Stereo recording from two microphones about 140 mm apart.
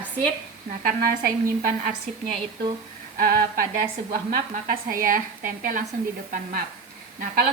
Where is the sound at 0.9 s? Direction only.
90° right.